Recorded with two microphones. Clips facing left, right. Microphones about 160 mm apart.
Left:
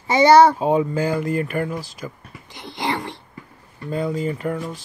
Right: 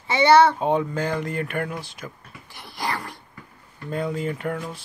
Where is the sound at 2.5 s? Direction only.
20° left (ahead or behind).